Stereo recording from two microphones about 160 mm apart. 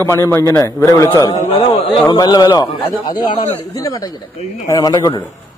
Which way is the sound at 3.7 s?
20° left (ahead or behind).